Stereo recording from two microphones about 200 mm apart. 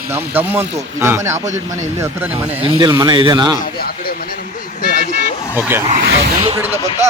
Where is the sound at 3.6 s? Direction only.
50° left (ahead or behind).